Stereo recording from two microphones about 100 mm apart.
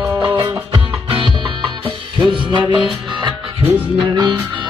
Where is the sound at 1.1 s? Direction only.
55° right (ahead or behind).